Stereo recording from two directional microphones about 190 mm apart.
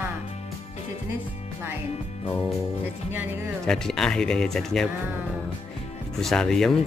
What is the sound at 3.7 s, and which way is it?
Speech, 5° left (ahead or behind).